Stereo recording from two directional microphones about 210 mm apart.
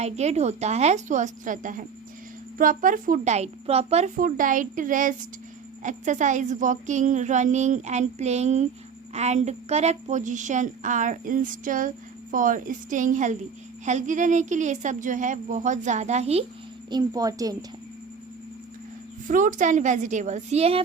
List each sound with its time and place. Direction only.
0.0 s speech: 30° right (ahead or behind)
16.9 s a child's voice: 15° right (ahead or behind)
19.3 s speech: 40° right (ahead or behind)